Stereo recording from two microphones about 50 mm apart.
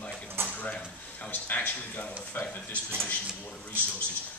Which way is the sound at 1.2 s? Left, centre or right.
Left.